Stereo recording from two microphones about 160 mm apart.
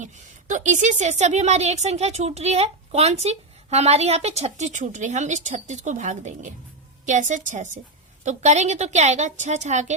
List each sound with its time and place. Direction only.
0.0 s a woman's voice: 50° right (ahead or behind)